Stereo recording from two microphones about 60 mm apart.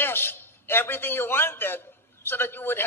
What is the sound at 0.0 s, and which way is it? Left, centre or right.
A man's voice, left.